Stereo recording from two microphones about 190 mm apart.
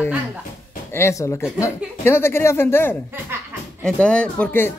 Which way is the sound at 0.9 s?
15° left (ahead or behind).